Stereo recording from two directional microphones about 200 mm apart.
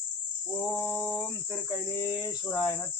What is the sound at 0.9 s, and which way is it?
Speech, 10° left (ahead or behind).